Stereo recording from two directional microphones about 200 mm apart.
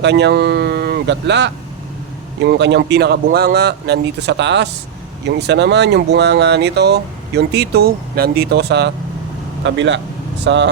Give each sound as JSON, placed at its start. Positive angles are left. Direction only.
{"t": 0.0, "sound": "speech", "side_deg": -60}